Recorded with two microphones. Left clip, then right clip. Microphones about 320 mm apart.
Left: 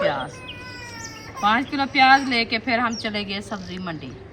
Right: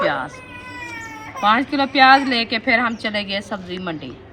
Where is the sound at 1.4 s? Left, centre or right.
Centre.